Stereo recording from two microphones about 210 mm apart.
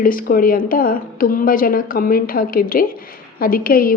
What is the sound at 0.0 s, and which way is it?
Speech, 40° left (ahead or behind).